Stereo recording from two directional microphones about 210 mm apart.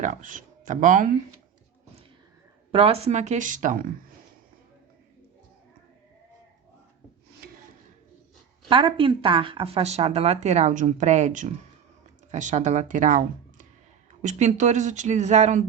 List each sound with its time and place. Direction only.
0.0 s speech: 40° right (ahead or behind)
2.7 s speech: 30° right (ahead or behind)
8.7 s speech: 25° right (ahead or behind)